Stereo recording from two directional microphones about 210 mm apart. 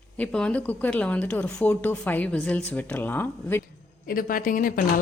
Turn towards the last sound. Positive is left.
turn(degrees=40)  # may be behind; listen again after turning